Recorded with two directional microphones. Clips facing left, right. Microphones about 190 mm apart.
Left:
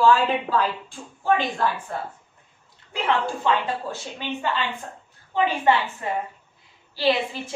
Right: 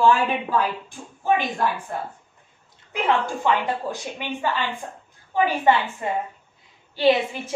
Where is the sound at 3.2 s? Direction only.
15° right (ahead or behind).